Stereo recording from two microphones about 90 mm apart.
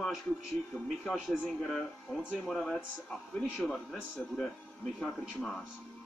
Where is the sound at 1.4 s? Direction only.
5° left (ahead or behind).